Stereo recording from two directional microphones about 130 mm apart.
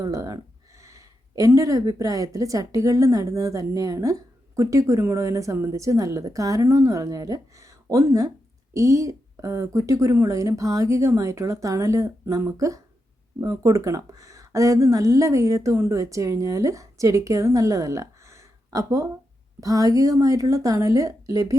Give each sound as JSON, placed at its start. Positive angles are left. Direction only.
{"t": 0.0, "sound": "a woman's voice", "side_deg": -25}